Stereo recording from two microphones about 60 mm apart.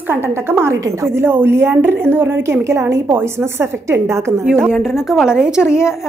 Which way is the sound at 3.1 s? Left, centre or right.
Right.